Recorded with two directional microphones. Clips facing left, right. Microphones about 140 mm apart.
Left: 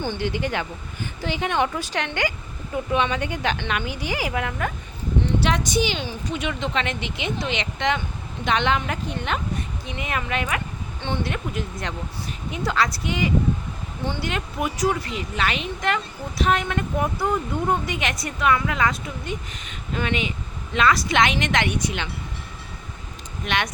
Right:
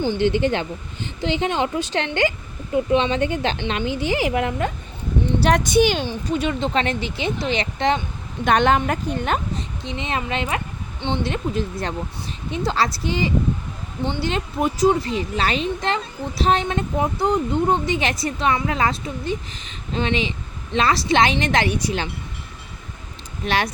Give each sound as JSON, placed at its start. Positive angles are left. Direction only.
{"t": 0.2, "sound": "speech", "side_deg": -25}
{"t": 5.4, "sound": "a woman's voice", "side_deg": -50}
{"t": 6.0, "sound": "speech", "side_deg": -35}
{"t": 8.4, "sound": "a woman's voice", "side_deg": -45}
{"t": 9.6, "sound": "speech", "side_deg": -25}